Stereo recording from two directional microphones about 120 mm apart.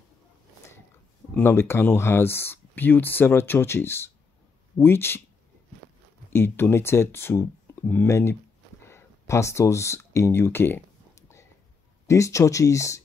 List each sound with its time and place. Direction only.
1.3 s speech: 20° left (ahead or behind)
6.3 s speech: 20° left (ahead or behind)
8.8 s a sound: 20° left (ahead or behind)
12.1 s speech: 25° left (ahead or behind)